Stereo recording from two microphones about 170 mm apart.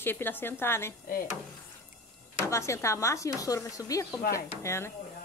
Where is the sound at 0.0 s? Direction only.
10° left (ahead or behind).